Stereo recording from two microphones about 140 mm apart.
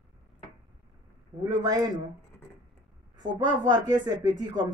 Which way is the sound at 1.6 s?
25° right (ahead or behind).